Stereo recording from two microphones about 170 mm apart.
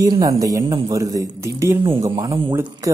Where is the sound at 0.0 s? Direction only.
20° right (ahead or behind).